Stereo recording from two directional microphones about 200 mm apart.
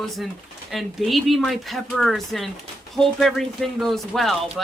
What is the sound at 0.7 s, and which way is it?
Speech, centre (ahead or behind).